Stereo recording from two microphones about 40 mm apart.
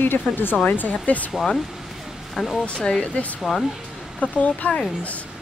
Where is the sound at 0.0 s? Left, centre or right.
Left.